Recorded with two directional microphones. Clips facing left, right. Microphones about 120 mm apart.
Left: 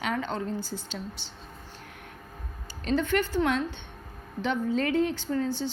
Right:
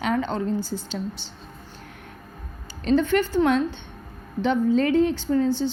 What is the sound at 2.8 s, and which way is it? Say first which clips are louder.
A woman's voice: right 6 dB; 30° right (ahead or behind).